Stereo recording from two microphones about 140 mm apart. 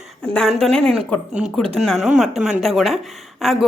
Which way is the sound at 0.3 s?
5° left (ahead or behind).